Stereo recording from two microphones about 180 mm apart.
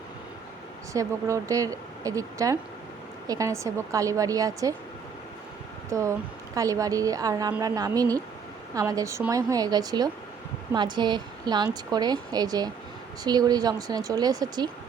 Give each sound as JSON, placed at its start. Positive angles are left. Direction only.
{"t": 0.9, "sound": "speech", "side_deg": -20}
{"t": 5.9, "sound": "speech", "side_deg": -15}